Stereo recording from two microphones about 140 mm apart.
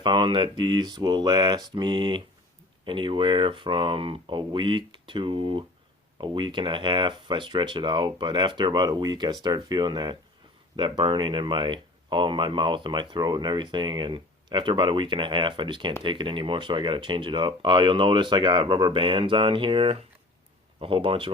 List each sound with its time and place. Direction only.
0.0 s speech: 35° right (ahead or behind)